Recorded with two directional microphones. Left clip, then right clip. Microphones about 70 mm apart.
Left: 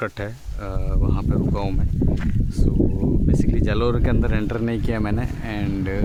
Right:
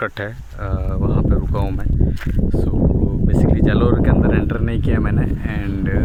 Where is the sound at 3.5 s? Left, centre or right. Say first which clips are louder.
Right 5 dB; right.